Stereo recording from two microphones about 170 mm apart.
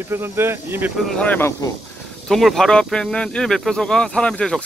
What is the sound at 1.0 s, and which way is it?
Speech, 5° left (ahead or behind).